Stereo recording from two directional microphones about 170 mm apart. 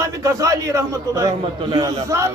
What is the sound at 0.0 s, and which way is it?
Speech, 20° right (ahead or behind).